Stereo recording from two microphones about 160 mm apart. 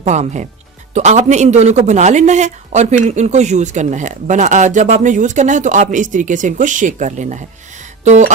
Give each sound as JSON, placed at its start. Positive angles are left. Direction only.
{"t": 0.0, "sound": "speech", "side_deg": -45}
{"t": 8.0, "sound": "throat clearing", "side_deg": -50}